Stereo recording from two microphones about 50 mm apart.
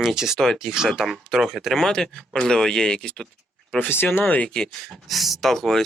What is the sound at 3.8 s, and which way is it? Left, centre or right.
Speech, left.